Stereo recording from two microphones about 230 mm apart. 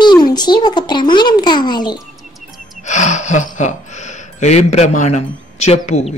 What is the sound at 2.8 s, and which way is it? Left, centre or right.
Speech, left.